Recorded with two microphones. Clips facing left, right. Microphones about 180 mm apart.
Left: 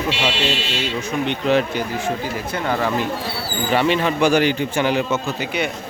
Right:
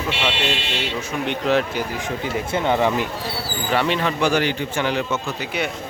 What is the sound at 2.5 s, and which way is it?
Speech, 20° right (ahead or behind).